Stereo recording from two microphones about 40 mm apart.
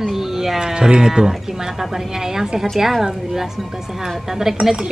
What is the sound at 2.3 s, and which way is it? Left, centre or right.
A woman's voice, centre.